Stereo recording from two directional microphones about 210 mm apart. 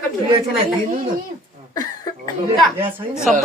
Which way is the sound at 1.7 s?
15° left (ahead or behind).